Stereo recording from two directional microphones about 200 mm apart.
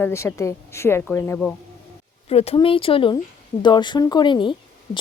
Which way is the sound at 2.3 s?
30° left (ahead or behind).